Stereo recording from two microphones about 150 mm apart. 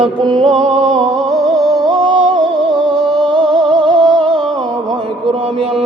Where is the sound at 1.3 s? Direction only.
Centre (ahead or behind).